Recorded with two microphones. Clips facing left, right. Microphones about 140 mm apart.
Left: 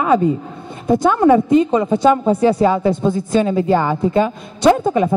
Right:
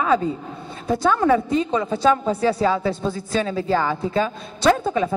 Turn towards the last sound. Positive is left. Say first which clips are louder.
# left 5 dB
turn(degrees=15)  # may be behind; listen again after turning